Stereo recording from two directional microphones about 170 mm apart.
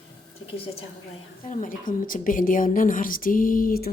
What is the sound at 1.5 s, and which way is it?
A woman's voice, 50° left (ahead or behind).